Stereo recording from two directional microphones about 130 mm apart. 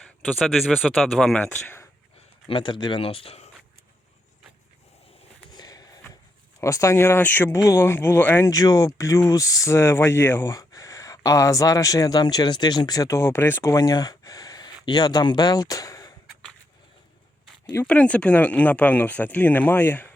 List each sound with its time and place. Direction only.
0.0 s speech: 5° left (ahead or behind)
1.5 s speech: 15° left (ahead or behind)
2.5 s speech: 40° left (ahead or behind)
5.5 s a sound: 30° left (ahead or behind)
6.6 s speech: 25° left (ahead or behind)
7.5 s speech: 25° left (ahead or behind)
8.4 s speech: 30° left (ahead or behind)
17.8 s speech: 10° left (ahead or behind)